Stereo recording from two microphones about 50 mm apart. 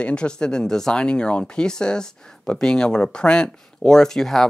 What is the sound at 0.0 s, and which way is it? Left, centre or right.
Speech, left.